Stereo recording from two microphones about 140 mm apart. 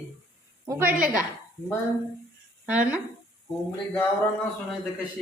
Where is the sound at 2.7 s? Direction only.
10° right (ahead or behind).